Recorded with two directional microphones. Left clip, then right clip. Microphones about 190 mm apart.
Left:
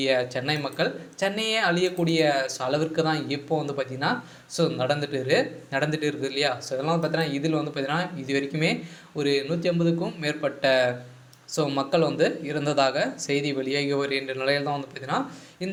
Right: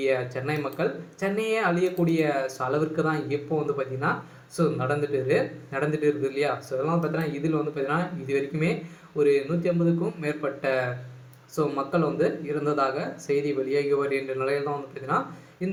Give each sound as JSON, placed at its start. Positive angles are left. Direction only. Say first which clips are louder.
{"t": 0.0, "sound": "speech", "louder": "left 2 dB", "side_deg": 25}
{"t": 4.5, "sound": "speech", "louder": "left 1 dB", "side_deg": 20}